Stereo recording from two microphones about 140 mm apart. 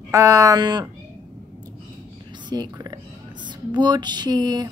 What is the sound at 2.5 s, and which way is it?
Speech, 30° right (ahead or behind).